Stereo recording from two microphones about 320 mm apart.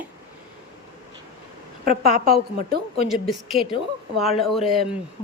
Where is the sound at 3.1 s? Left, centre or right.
Centre.